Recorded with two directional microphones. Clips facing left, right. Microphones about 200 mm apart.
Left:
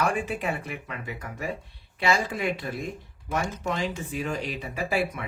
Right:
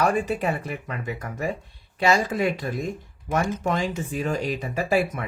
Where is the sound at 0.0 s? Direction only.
40° right (ahead or behind).